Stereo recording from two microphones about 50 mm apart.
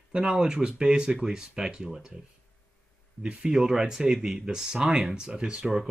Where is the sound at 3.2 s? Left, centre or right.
Centre.